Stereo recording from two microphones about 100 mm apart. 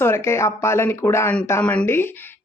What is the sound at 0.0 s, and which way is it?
A woman's voice, 25° left (ahead or behind).